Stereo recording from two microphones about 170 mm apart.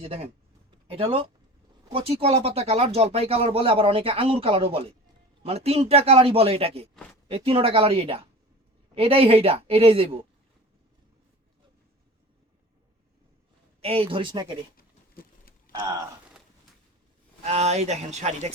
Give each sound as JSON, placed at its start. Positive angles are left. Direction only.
{"t": 0.0, "sound": "speech", "side_deg": -35}
{"t": 13.8, "sound": "speech", "side_deg": -35}
{"t": 15.1, "sound": "a sound", "side_deg": 60}
{"t": 15.7, "sound": "speech", "side_deg": -25}
{"t": 17.4, "sound": "speech", "side_deg": -40}